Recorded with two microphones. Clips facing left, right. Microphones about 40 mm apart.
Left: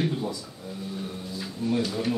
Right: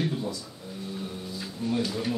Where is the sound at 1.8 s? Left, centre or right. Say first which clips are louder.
Left 1 dB; centre.